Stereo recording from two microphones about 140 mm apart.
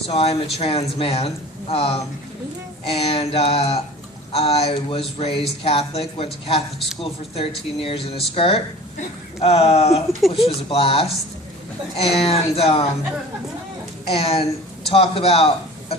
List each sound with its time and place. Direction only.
0.1 s speech: 45° left (ahead or behind)
10.2 s speech: centre (ahead or behind)
10.4 s speech: 40° left (ahead or behind)
12.2 s speech: 45° left (ahead or behind)
14.1 s speech: 45° left (ahead or behind)